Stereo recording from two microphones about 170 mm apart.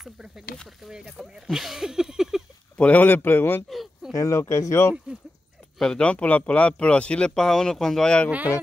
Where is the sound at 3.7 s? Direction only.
Centre (ahead or behind).